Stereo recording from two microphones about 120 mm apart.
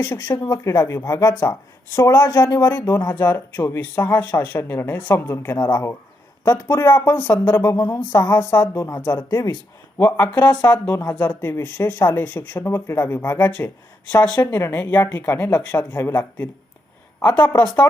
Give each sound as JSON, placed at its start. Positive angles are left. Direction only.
{"t": 0.0, "sound": "speech", "side_deg": 20}
{"t": 0.4, "sound": "speech", "side_deg": 30}
{"t": 3.1, "sound": "a woman's voice", "side_deg": 15}